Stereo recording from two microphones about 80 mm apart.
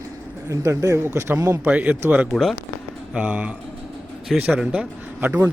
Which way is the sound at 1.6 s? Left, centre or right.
Centre.